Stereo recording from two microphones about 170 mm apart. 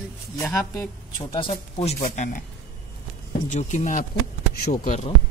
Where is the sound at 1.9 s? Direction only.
50° left (ahead or behind).